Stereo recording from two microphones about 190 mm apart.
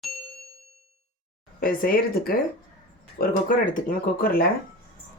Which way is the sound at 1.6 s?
50° left (ahead or behind).